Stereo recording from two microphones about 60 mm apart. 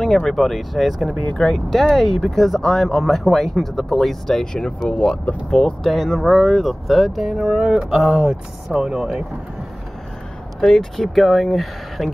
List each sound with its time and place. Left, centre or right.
0.0 s speech: centre
1.1 s speech: centre
5.9 s speech: centre
10.6 s speech: centre